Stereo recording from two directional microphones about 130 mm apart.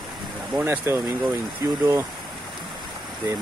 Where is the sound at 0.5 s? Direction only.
15° right (ahead or behind).